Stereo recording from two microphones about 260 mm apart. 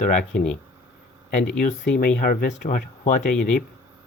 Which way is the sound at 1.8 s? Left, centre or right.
Left.